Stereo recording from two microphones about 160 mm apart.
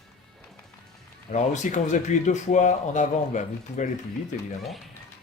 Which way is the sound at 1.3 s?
50° left (ahead or behind).